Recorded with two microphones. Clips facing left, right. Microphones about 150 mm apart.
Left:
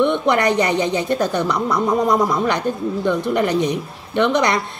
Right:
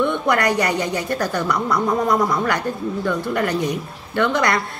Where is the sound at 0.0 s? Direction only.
20° left (ahead or behind).